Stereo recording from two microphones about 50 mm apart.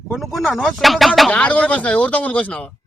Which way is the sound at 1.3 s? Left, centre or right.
Left.